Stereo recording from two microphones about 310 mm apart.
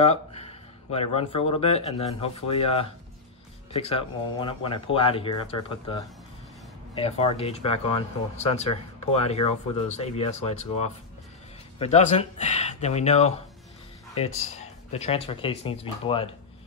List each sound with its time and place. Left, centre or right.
0.0 s a sound: centre
1.1 s speech: centre
14.9 s speech: centre